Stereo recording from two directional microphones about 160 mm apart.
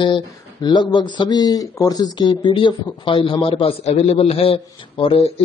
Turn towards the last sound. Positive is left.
turn(degrees=35)  # may be behind; listen again after turning